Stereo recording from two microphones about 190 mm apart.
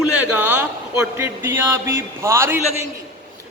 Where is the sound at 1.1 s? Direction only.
10° right (ahead or behind).